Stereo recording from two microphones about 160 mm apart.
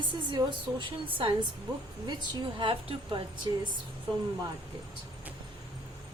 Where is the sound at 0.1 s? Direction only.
30° right (ahead or behind).